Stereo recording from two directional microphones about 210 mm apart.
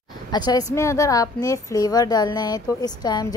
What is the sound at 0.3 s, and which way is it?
A woman's voice, 20° left (ahead or behind).